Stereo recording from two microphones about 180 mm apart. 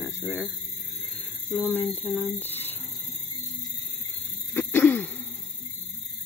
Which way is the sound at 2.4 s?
10° left (ahead or behind).